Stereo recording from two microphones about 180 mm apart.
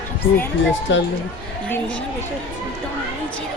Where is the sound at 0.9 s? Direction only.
90° left.